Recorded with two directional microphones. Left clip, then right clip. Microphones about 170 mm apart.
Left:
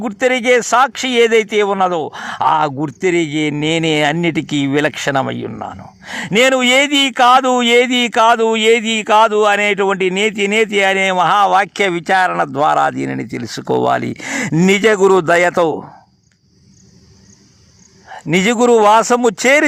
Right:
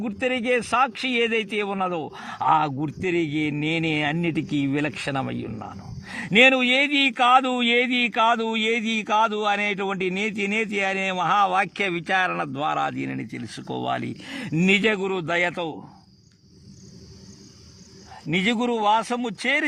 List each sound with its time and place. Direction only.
0.0 s speech: 30° left (ahead or behind)
6.5 s speech: 45° left (ahead or behind)
6.7 s speech: 35° left (ahead or behind)
15.3 s speech: 35° left (ahead or behind)
15.5 s speech: 55° left (ahead or behind)
18.1 s a sound: 40° left (ahead or behind)
18.5 s speech: 55° left (ahead or behind)